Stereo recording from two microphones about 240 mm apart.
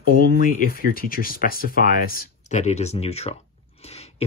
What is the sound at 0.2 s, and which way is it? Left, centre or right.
Speech, left.